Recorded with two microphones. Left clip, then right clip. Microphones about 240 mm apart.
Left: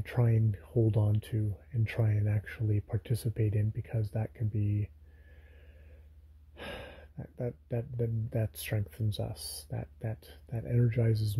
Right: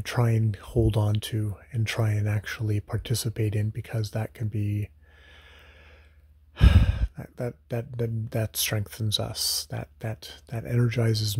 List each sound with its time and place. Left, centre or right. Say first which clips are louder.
0.0 s speech: right 6 dB; centre
6.5 s speech: right 12 dB; centre